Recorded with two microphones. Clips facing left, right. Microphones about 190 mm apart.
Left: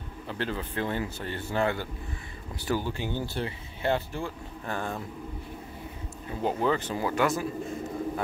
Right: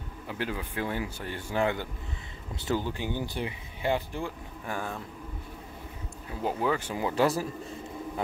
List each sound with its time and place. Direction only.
0.3 s speech: 10° right (ahead or behind)
6.4 s speech: 10° right (ahead or behind)
7.2 s a man's voice: 35° right (ahead or behind)